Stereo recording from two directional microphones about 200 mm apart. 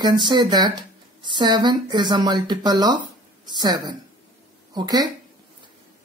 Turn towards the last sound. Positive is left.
turn(degrees=-20)  # may be behind; listen again after turning